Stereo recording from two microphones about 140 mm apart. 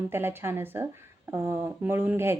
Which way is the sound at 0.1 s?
15° right (ahead or behind).